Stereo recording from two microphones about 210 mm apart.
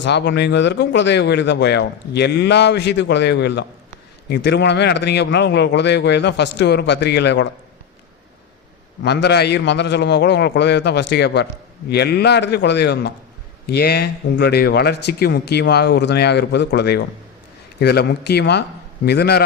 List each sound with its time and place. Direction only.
0.0 s speech: 55° left (ahead or behind)
9.0 s speech: 50° left (ahead or behind)